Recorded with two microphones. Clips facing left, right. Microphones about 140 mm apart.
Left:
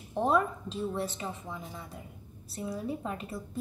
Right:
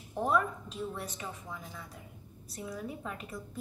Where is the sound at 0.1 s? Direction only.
25° left (ahead or behind).